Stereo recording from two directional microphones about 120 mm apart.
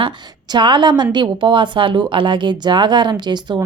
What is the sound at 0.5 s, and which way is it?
A woman's voice, 40° right (ahead or behind).